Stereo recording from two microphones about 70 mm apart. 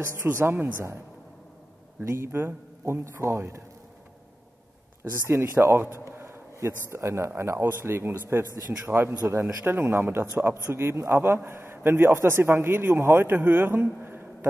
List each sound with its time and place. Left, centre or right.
0.0 s a man's voice: right
2.0 s a man's voice: right
5.2 s a man's voice: right
9.8 s a man's voice: right
14.0 s a sound: right